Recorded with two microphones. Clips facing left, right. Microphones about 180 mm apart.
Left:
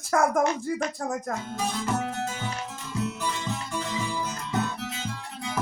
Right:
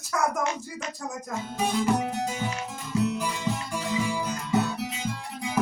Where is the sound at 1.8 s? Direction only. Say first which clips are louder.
Right 3 dB; 15° right (ahead or behind).